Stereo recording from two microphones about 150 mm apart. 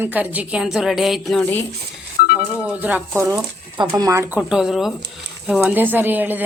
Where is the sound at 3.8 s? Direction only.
25° right (ahead or behind).